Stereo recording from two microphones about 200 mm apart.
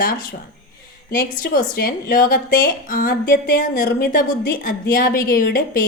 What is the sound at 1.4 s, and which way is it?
A woman's voice, 50° left (ahead or behind).